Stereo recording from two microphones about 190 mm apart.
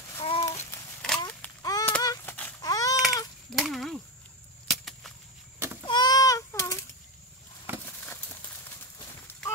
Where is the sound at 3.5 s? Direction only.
Centre (ahead or behind).